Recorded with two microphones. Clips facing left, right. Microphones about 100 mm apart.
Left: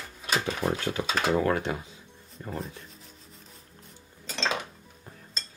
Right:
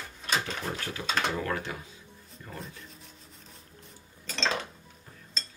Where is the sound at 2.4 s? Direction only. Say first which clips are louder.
Left 7 dB; 30° left (ahead or behind).